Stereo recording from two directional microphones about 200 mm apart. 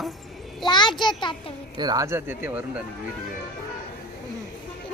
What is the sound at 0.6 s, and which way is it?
Speech, 20° left (ahead or behind).